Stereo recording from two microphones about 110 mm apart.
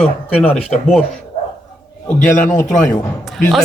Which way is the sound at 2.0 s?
15° left (ahead or behind).